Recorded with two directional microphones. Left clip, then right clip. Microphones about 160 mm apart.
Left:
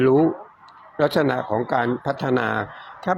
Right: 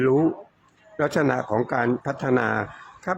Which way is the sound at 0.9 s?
Centre (ahead or behind).